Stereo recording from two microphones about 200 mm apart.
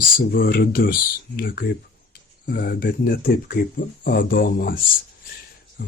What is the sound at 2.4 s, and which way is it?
Speech, 50° left (ahead or behind).